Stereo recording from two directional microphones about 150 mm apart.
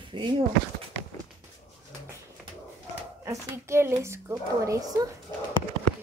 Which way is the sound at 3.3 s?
20° right (ahead or behind).